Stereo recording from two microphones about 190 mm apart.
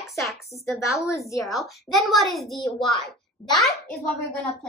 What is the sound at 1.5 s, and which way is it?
A woman's voice, centre (ahead or behind).